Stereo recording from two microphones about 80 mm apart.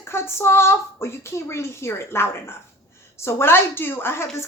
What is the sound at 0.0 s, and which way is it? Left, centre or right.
Speech, left.